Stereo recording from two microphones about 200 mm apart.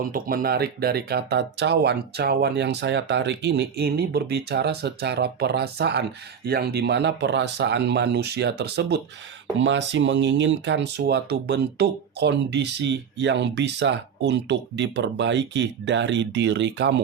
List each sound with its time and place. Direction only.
0.1 s speech: 45° right (ahead or behind); by 16.9 s 60° right (ahead or behind)